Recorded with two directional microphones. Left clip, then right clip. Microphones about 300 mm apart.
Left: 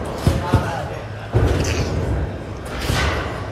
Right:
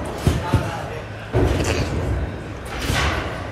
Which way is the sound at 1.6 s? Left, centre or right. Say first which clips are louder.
Even; centre.